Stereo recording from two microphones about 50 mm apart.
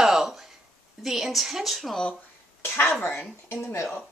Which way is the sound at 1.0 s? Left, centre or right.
Centre.